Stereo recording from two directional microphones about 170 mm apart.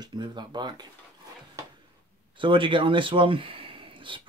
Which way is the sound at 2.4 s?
30° right (ahead or behind).